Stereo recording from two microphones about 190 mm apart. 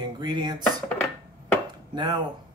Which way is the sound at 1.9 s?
25° right (ahead or behind).